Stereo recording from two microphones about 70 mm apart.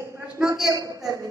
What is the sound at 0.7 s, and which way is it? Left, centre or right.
Speech, right.